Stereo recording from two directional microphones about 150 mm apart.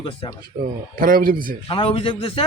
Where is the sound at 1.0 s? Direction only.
70° right (ahead or behind).